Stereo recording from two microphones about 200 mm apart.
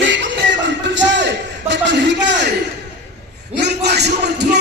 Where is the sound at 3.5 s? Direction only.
55° right (ahead or behind).